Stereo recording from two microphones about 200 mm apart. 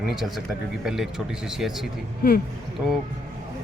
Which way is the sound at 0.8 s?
5° right (ahead or behind).